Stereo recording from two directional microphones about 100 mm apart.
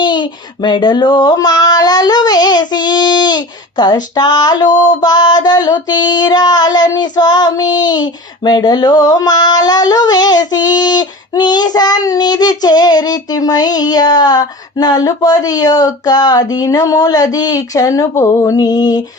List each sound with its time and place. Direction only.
0.0 s female singing: 50° left (ahead or behind)